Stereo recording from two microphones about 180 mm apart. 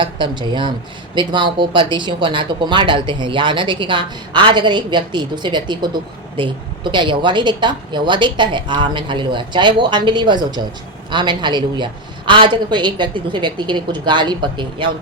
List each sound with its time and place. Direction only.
0.0 s speech: 25° right (ahead or behind)